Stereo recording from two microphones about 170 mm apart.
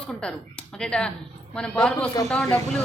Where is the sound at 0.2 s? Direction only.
5° left (ahead or behind).